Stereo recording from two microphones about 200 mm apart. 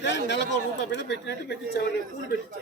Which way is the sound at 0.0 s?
60° left (ahead or behind).